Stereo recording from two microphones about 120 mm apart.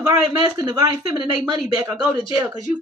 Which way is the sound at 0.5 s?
35° right (ahead or behind).